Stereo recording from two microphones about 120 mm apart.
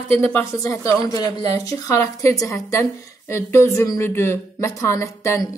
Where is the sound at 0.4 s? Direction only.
25° left (ahead or behind).